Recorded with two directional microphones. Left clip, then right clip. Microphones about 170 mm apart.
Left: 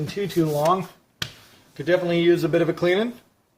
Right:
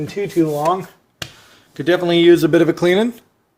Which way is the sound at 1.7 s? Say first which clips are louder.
Right 6 dB; 65° right (ahead or behind).